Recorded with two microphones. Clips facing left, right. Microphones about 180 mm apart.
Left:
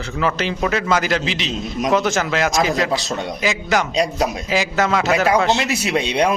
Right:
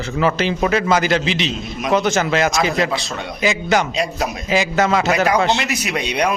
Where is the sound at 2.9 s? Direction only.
40° left (ahead or behind).